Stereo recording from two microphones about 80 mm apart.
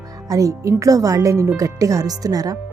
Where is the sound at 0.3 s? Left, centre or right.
Right.